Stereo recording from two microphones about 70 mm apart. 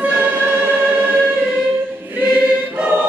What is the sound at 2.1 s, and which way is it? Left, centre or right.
Choir, right.